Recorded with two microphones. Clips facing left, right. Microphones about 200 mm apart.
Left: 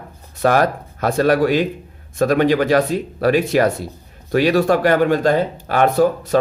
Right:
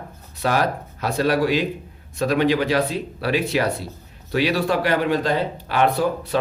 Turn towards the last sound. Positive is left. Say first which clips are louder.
# left 6 dB
turn(degrees=45)  # may be behind; listen again after turning